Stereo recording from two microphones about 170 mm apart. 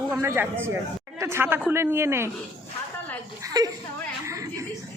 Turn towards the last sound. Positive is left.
turn(degrees=-20)  # may be behind; listen again after turning